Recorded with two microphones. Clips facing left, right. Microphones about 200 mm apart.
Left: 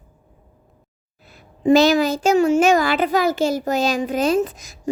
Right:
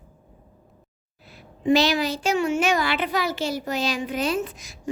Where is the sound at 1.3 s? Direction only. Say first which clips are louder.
Left 5 dB; 45° left (ahead or behind).